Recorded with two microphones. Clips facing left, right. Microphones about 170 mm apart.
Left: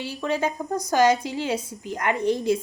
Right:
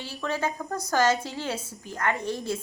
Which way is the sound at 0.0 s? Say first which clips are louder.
Left 4 dB; 15° left (ahead or behind).